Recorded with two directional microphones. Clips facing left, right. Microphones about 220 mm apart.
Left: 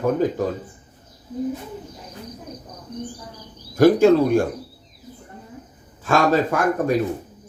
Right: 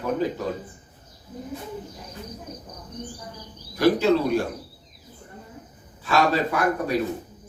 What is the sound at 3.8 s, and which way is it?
Speech, 50° left (ahead or behind).